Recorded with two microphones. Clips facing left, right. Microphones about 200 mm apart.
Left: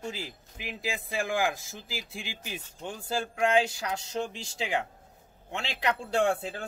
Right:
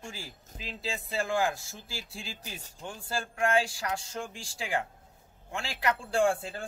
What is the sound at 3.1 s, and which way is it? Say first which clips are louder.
Speech: left 2 dB; 20° left (ahead or behind).